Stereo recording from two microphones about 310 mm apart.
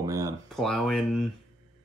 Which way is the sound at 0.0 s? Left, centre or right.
Centre.